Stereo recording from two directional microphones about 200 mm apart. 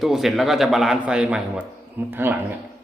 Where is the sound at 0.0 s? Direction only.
Centre (ahead or behind).